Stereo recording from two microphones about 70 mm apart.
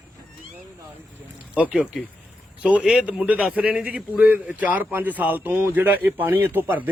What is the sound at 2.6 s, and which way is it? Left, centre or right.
A man's voice, centre.